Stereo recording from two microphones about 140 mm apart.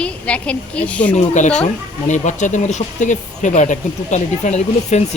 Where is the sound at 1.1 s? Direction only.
55° left (ahead or behind).